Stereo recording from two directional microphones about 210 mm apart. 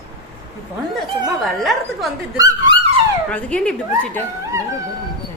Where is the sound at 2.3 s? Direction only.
20° right (ahead or behind).